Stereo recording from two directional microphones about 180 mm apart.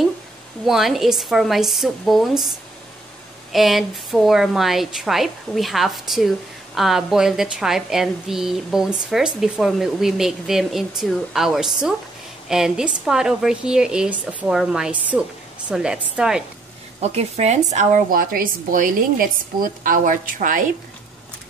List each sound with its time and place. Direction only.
0.7 s a woman's voice: centre (ahead or behind)
3.5 s a woman's voice: centre (ahead or behind)
17.0 s a woman's voice: 35° right (ahead or behind)